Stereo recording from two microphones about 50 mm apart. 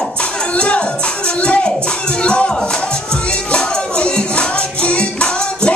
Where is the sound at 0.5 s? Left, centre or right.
Left.